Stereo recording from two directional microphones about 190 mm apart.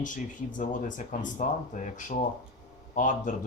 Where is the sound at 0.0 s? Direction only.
40° left (ahead or behind).